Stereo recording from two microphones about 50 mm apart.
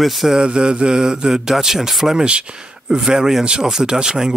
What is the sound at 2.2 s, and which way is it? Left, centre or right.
Speech, centre.